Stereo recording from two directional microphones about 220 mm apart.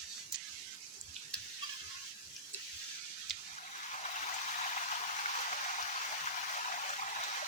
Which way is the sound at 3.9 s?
35° left (ahead or behind).